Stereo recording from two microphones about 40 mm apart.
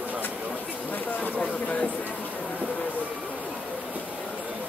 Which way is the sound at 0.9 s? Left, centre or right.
Left.